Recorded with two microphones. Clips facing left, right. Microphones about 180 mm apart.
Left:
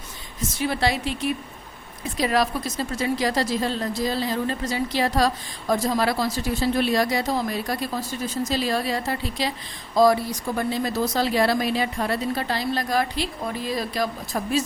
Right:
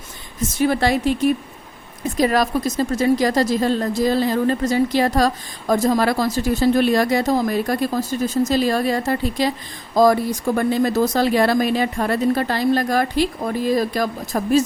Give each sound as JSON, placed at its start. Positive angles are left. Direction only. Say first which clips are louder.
{"t": 0.6, "sound": "a woman's voice", "louder": "right 6 dB", "side_deg": -45}